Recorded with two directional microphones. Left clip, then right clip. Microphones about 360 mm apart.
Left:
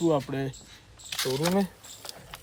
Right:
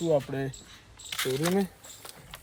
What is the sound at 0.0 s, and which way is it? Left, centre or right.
Speech, centre.